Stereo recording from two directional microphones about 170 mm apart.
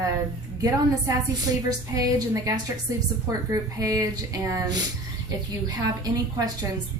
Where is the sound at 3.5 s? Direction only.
20° right (ahead or behind).